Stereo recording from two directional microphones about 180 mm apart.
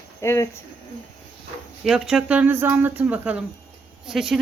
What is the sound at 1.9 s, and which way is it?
Speech, 5° right (ahead or behind).